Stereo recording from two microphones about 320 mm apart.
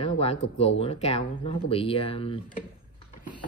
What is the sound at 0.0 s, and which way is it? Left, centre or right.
Speech, centre.